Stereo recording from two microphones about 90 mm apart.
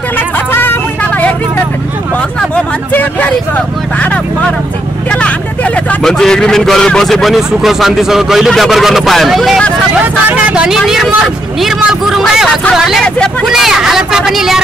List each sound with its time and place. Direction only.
0.5 s vehicle: 20° left (ahead or behind)
2.5 s a man's voice: 20° left (ahead or behind); by 9.6 s centre (ahead or behind)
10.3 s a man's voice: 10° right (ahead or behind)